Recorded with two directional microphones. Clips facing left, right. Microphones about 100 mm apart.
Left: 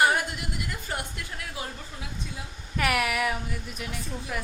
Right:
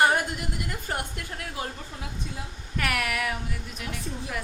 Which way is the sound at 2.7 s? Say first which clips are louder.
Left 3 dB; 5° left (ahead or behind).